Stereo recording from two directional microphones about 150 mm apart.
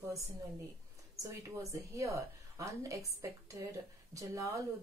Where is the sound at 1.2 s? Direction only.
20° right (ahead or behind).